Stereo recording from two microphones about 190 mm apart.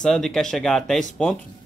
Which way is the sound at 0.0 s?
Centre (ahead or behind).